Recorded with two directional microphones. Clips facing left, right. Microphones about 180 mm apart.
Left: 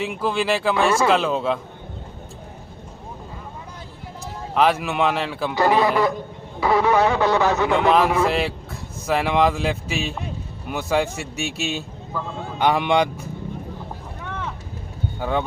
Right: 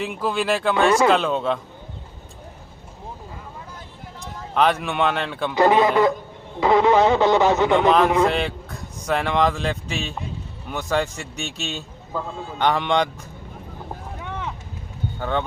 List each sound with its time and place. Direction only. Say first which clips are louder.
0.0 s speech: left 1 dB; centre (ahead or behind)
4.5 s speech: left 1 dB; 5° left (ahead or behind)
5.5 s speech: right 2 dB; 20° right (ahead or behind)
7.7 s speech: right 1 dB; 5° left (ahead or behind)
14.3 s vehicle: even; 15° right (ahead or behind)
15.2 s speech: left 1 dB; 10° left (ahead or behind)